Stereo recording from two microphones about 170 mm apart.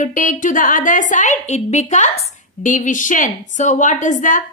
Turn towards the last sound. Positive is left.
turn(degrees=50)  # may be behind; listen again after turning